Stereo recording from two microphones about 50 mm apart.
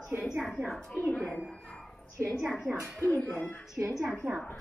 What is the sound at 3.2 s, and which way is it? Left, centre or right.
Speech, left.